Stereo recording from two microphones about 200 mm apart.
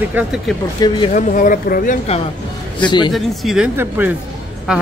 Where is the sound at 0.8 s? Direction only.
20° left (ahead or behind).